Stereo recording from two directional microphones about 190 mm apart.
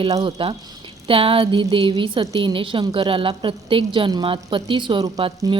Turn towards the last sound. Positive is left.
turn(degrees=-25)  # may be behind; listen again after turning